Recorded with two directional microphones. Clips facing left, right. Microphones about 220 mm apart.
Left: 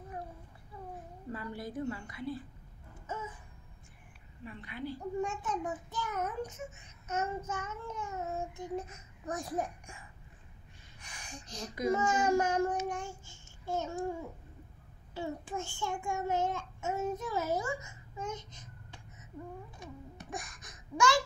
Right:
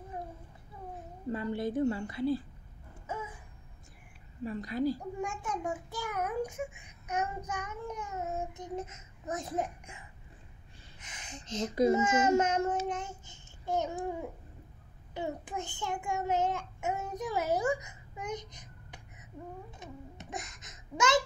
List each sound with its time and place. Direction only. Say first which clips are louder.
1.3 s a child's voice: right 7 dB; 25° right (ahead or behind)
3.1 s a sound: right 2 dB; 10° right (ahead or behind)
4.5 s a woman's voice: right 9 dB; 40° right (ahead or behind)
5.2 s a child's voice: even; 10° right (ahead or behind)
12.8 s child singing: right 1 dB; 20° right (ahead or behind)
15.1 s child singing: right 1 dB; 15° right (ahead or behind)
19.7 s babbling: right 1 dB; 20° right (ahead or behind)